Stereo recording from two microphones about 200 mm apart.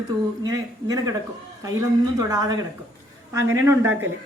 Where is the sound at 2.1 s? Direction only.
20° right (ahead or behind).